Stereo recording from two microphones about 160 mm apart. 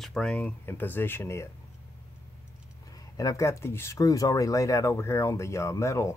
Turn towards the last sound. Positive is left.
turn(degrees=20)  # may be behind; listen again after turning